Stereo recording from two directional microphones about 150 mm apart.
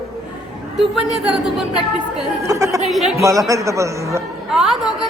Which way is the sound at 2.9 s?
Centre (ahead or behind).